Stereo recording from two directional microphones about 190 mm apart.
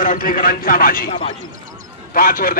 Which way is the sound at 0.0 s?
45° left (ahead or behind).